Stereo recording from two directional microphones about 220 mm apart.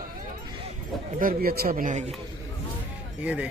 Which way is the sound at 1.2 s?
45° right (ahead or behind).